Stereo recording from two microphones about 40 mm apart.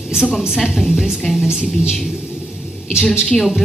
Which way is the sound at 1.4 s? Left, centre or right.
Centre.